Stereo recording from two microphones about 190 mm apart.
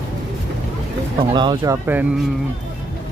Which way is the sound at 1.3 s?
25° right (ahead or behind).